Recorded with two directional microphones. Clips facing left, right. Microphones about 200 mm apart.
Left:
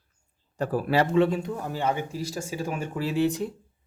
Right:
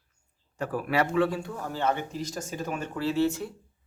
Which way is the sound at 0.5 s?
35° left (ahead or behind).